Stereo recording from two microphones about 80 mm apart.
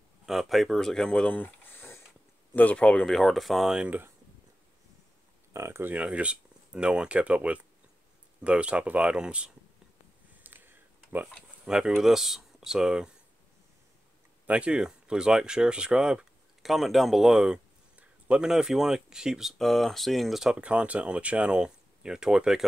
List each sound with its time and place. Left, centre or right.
0.3 s speech: centre
5.5 s speech: right
5.9 s speech: centre
10.3 s a sound: right
11.6 s speech: centre
14.4 s speech: centre
19.6 s speech: centre